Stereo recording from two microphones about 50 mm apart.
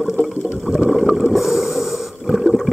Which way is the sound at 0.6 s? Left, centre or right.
Centre.